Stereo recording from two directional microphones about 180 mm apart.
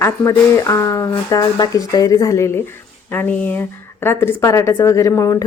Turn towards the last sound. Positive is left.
turn(degrees=15)  # may be behind; listen again after turning